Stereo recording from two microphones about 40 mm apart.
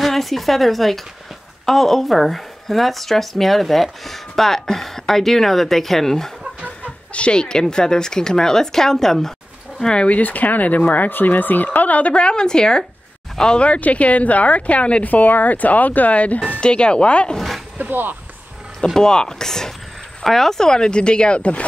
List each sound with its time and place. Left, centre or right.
0.0 s speech: centre
7.2 s a woman's voice: left
10.0 s speech: left
12.1 s speech: left
13.7 s speech: left
15.0 s speech: left
16.5 s speech: left
17.7 s speech: right
18.9 s a woman's voice: centre; by 21.6 s left